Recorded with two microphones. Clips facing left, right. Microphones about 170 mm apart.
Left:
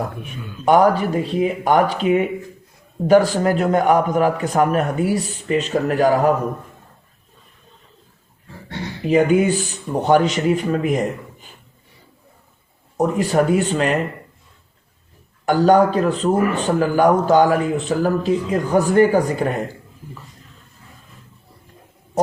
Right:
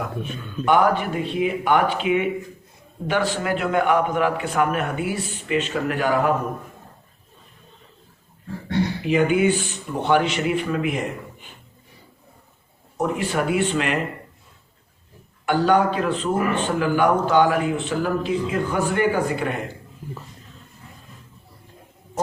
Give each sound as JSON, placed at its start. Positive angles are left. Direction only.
{"t": 0.6, "sound": "a man's voice", "side_deg": 40}
{"t": 9.0, "sound": "a man's voice", "side_deg": 40}
{"t": 13.0, "sound": "a man's voice", "side_deg": 40}
{"t": 15.4, "sound": "a man's voice", "side_deg": 40}